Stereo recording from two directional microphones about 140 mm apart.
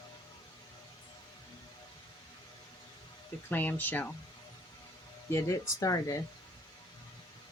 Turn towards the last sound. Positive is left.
turn(degrees=25)  # may be behind; listen again after turning